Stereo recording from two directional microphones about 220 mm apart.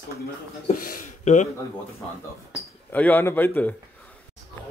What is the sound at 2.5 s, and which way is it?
Speech, 5° left (ahead or behind).